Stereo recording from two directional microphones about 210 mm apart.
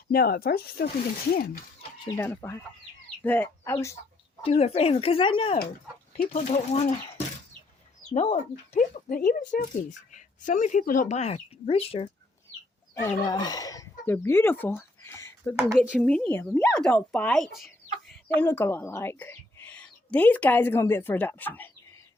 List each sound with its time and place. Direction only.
0.1 s speech: 45° left (ahead or behind)
2.0 s speech: 10° left (ahead or behind)
4.4 s speech: 30° left (ahead or behind)
6.1 s speech: 35° left (ahead or behind)
8.1 s speech: 35° left (ahead or behind)
12.9 s speech: 15° left (ahead or behind)
15.8 s speech: centre (ahead or behind)